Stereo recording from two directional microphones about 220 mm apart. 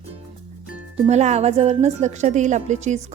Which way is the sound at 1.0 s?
30° right (ahead or behind).